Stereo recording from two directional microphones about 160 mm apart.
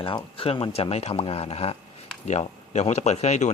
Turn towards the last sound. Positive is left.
turn(degrees=45)  # may be behind; listen again after turning